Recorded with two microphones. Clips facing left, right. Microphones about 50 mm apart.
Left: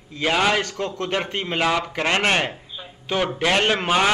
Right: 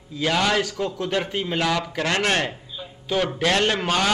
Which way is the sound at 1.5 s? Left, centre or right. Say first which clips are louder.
Left 3 dB; left.